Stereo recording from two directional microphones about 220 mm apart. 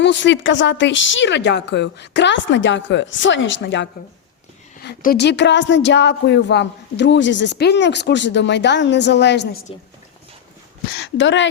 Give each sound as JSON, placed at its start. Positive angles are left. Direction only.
{"t": 0.0, "sound": "a woman's voice", "side_deg": 55}
{"t": 11.0, "sound": "speech", "side_deg": 55}